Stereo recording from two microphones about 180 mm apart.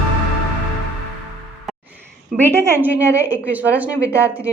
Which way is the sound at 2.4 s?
15° right (ahead or behind).